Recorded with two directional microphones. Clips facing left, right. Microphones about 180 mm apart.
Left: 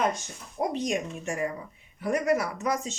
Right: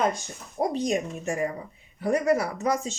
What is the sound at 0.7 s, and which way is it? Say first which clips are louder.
Speech: right 3 dB; 35° right (ahead or behind).